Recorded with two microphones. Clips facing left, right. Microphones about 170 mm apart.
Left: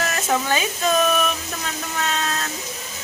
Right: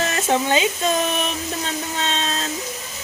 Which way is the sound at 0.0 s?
25° right (ahead or behind).